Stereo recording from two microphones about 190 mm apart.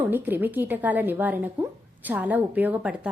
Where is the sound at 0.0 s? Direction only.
10° right (ahead or behind).